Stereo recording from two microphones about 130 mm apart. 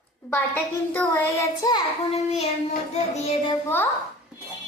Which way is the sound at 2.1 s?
55° left (ahead or behind).